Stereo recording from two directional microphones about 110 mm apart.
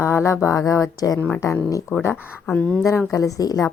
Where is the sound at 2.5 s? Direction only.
15° left (ahead or behind).